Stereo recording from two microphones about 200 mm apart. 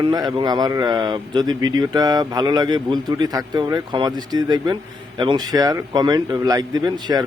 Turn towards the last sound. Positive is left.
turn(degrees=-20)  # may be behind; listen again after turning